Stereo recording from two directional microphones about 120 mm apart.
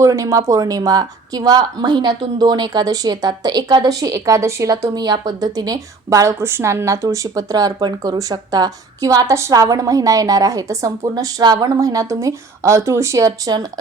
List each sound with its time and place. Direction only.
0.0 s speech: 25° right (ahead or behind)